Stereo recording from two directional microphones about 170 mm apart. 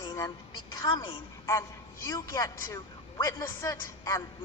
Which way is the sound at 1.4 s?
15° left (ahead or behind).